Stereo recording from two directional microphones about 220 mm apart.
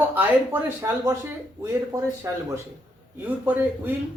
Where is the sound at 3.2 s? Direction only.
10° right (ahead or behind).